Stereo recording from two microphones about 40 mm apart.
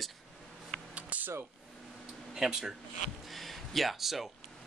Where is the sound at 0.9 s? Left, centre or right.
Right.